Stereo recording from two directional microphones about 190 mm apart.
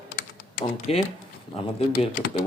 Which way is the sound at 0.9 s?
30° left (ahead or behind).